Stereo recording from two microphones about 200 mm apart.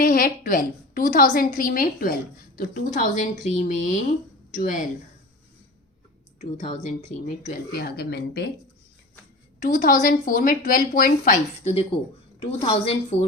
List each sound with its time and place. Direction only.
0.0 s a woman's voice: 40° left (ahead or behind)
6.4 s a woman's voice: 35° left (ahead or behind)
7.7 s a woman's voice: 50° left (ahead or behind)
9.6 s a woman's voice: 40° left (ahead or behind)
11.6 s a woman's voice: 30° left (ahead or behind)